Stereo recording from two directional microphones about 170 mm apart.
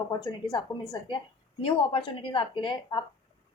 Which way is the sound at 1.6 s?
30° left (ahead or behind).